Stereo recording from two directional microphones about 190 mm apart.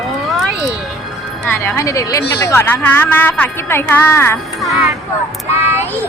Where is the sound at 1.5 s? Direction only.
15° left (ahead or behind).